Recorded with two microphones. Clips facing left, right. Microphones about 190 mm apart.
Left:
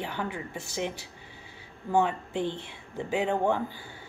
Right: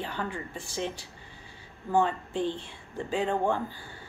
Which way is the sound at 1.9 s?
15° left (ahead or behind).